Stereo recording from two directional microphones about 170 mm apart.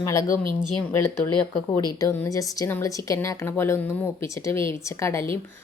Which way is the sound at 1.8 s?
20° left (ahead or behind).